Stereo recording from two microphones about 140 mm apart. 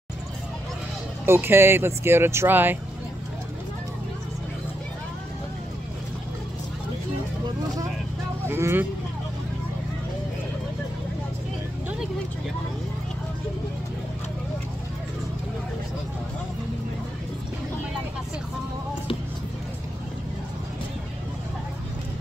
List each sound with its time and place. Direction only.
1.2 s speech: 15° right (ahead or behind)
8.5 s vehicle: 15° right (ahead or behind)